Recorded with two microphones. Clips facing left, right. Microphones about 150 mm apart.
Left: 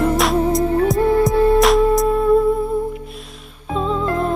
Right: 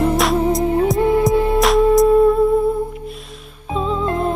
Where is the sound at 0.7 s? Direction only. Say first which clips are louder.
Even; 20° right (ahead or behind).